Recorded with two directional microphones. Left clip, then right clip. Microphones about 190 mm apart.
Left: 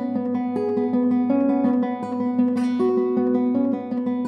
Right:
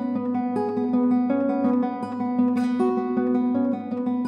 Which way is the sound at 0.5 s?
35° left (ahead or behind).